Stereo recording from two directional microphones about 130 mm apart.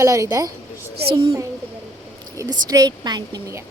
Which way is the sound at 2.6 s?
30° right (ahead or behind).